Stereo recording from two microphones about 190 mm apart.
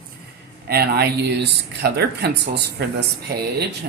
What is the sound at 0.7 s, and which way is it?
Speech, 60° right (ahead or behind).